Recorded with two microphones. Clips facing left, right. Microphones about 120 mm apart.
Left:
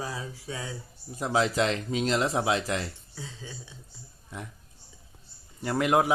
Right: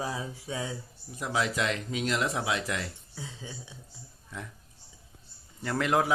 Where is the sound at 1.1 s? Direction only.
30° left (ahead or behind).